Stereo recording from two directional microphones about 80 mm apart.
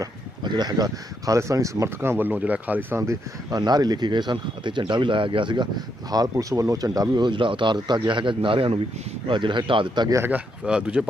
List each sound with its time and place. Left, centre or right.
0.4 s speech: right
2.0 s speech: right
3.5 s speech: right
6.1 s speech: right
6.4 s speech: right
7.3 s speech: right
10.6 s speech: centre